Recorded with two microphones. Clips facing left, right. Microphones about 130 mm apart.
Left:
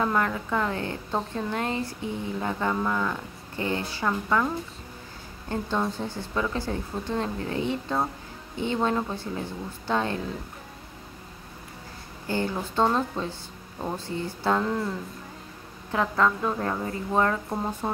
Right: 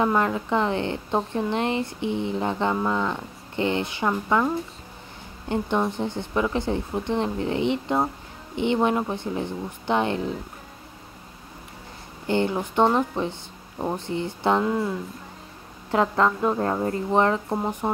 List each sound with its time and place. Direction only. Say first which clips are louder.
0.0 s speech: right 3 dB; 20° right (ahead or behind)
5.5 s speech: right 4 dB; 20° right (ahead or behind)
12.3 s speech: right 5 dB; 20° right (ahead or behind)
14.6 s speech: right 3 dB; 10° right (ahead or behind)
15.9 s speech: right 3 dB; 25° right (ahead or behind)